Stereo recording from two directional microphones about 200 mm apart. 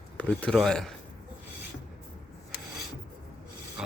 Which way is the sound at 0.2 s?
5° left (ahead or behind).